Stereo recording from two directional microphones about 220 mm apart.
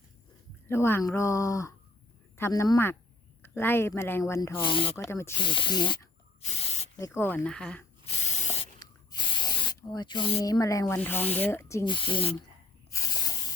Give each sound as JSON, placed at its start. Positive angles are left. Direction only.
{"t": 0.7, "sound": "speech", "side_deg": 10}
{"t": 6.4, "sound": "spray", "side_deg": 30}
{"t": 7.0, "sound": "speech", "side_deg": 10}
{"t": 8.0, "sound": "spray", "side_deg": 25}
{"t": 9.4, "sound": "speech", "side_deg": 20}